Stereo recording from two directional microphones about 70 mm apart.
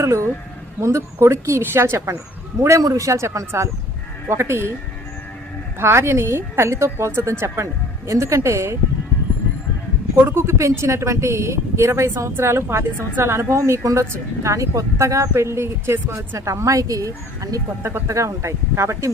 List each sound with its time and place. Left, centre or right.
0.0 s a woman's voice: right
2.8 s a woman's voice: right
5.8 s a woman's voice: right
10.2 s a woman's voice: right
18.1 s a woman's voice: right